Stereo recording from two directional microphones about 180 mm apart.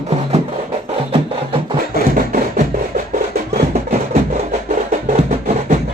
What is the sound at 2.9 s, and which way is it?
Music, 55° right (ahead or behind).